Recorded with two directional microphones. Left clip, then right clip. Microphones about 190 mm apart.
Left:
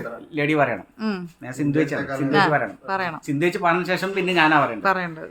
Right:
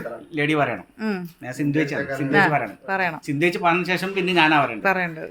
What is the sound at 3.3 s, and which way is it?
Speech, 10° left (ahead or behind).